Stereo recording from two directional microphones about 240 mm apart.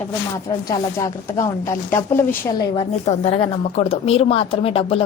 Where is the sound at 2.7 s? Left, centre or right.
Left.